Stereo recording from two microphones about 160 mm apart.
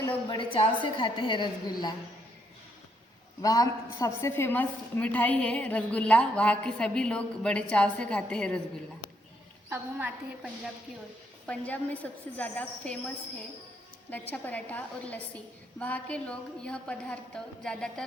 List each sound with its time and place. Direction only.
0.3 s a woman's voice: 30° left (ahead or behind)
3.4 s a woman's voice: 25° left (ahead or behind); by 8.6 s 5° left (ahead or behind)
9.6 s a woman's voice: 15° right (ahead or behind)
11.4 s a woman's voice: 10° left (ahead or behind)
14.1 s a woman's voice: 10° left (ahead or behind)